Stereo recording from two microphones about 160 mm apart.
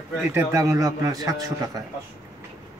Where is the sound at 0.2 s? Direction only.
15° right (ahead or behind).